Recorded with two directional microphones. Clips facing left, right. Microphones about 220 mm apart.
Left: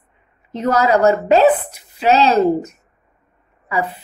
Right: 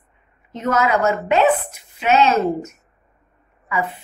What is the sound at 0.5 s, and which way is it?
A woman's voice, 35° left (ahead or behind).